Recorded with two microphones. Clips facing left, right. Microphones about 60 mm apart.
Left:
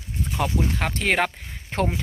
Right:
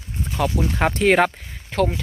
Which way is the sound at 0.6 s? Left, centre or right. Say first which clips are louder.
Right 5 dB; centre.